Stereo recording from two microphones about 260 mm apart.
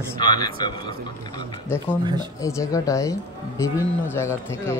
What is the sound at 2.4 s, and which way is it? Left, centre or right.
Speech, centre.